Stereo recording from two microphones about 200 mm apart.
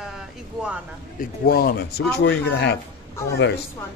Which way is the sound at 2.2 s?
60° left (ahead or behind).